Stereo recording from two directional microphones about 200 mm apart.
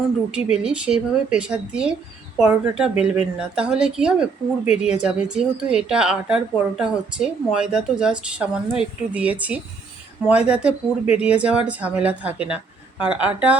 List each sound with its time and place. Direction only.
0.5 s speech: 5° right (ahead or behind)